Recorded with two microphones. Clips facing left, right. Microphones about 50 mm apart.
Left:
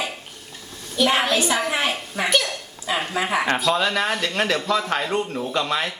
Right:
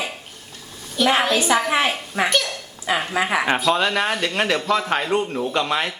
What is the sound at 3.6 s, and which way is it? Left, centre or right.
A man's voice, centre.